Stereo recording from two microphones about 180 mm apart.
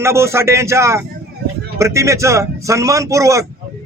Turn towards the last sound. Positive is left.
turn(degrees=-15)  # may be behind; listen again after turning